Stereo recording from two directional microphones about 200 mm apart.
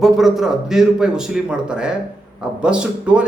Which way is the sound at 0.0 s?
Centre (ahead or behind).